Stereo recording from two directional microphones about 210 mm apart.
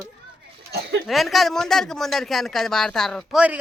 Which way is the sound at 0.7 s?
55° right (ahead or behind).